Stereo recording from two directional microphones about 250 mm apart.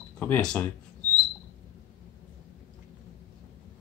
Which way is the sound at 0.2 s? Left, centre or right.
Centre.